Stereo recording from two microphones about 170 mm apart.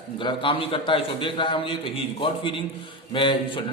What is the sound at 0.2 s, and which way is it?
Speech, 30° left (ahead or behind).